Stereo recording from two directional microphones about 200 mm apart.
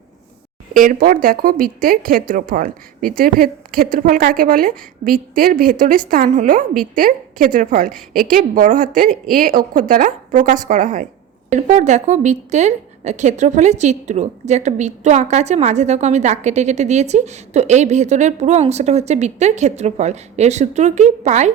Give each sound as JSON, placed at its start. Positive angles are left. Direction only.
{"t": 0.7, "sound": "a woman's voice", "side_deg": -45}